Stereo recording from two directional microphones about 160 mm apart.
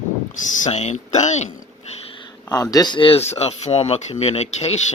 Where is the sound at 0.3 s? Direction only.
50° left (ahead or behind).